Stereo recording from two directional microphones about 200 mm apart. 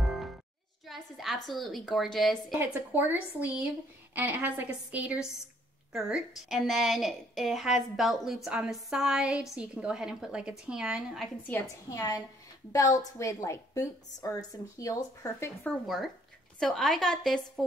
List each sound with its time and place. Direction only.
0.0 s music: centre (ahead or behind)
0.8 s a woman's voice: centre (ahead or behind)
11.4 s a woman's voice: 15° left (ahead or behind)